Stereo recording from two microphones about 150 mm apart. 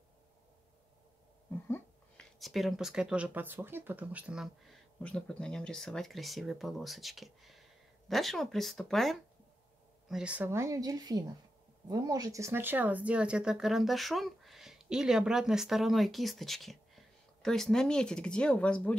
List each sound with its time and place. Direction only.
2.1 s speech: centre (ahead or behind)
5.0 s speech: 5° left (ahead or behind)